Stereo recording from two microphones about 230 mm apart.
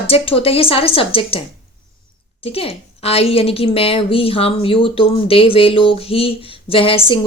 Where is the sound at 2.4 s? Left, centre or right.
Left.